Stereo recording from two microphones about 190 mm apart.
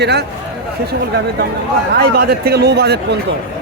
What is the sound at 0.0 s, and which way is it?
Speech, 60° right (ahead or behind).